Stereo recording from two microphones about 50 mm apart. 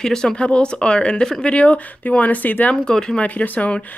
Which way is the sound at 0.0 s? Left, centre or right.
Centre.